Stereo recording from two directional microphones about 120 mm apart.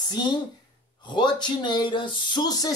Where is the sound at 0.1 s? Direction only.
35° left (ahead or behind).